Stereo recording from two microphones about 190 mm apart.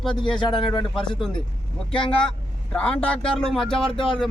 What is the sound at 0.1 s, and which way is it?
Speech, 25° left (ahead or behind).